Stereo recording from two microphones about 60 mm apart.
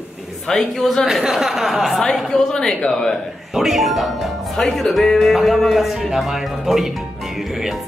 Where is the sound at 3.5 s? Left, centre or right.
Centre.